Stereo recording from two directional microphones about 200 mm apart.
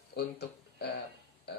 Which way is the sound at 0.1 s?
55° left (ahead or behind).